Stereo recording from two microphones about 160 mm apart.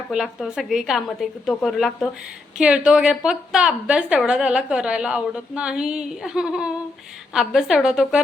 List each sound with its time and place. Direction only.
0.1 s a woman's voice: centre (ahead or behind)